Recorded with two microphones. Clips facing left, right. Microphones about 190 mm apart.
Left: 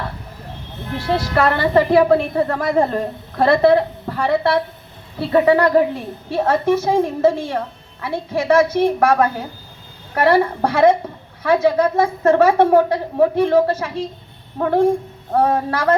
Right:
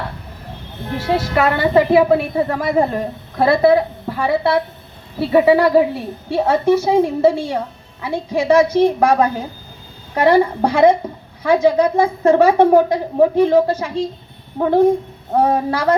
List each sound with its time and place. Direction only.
1.4 s a woman's voice: 15° right (ahead or behind)